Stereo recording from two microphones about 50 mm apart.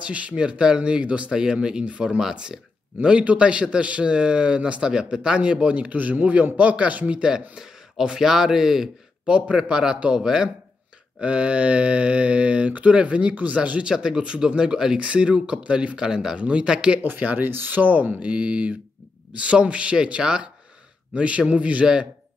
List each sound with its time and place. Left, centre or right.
0.0 s a man's voice: right
2.1 s speech: centre
3.0 s a man's voice: right
4.8 s a man's voice: centre
9.2 s a man's voice: right
11.1 s a man's voice: right
16.0 s speech: centre
16.3 s a man's voice: right
17.0 s speech: right
18.2 s a man's voice: right